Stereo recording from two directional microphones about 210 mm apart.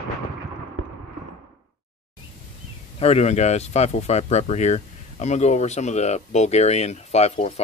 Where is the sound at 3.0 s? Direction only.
30° left (ahead or behind).